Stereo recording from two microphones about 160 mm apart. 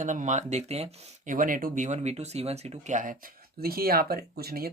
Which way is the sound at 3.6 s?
70° right (ahead or behind).